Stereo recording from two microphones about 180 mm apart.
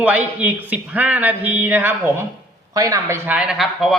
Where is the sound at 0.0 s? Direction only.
10° right (ahead or behind).